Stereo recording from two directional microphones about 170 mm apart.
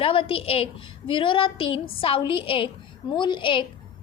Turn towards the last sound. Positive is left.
turn(degrees=30)  # may be behind; listen again after turning